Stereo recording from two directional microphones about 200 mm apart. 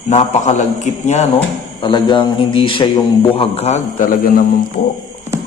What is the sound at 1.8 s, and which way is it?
A man's voice, 25° left (ahead or behind).